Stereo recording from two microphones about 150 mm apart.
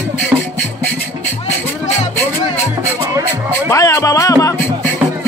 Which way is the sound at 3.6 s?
20° left (ahead or behind).